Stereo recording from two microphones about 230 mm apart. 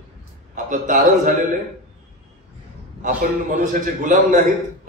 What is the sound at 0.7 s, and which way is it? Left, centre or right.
Speech, right.